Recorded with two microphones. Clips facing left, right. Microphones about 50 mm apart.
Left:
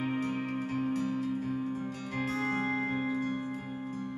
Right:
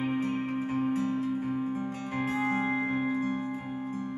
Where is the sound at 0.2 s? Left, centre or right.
Right.